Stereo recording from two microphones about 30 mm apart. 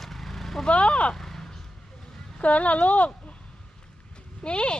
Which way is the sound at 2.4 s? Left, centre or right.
Left.